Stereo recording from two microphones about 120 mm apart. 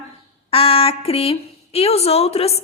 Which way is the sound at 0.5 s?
55° left (ahead or behind).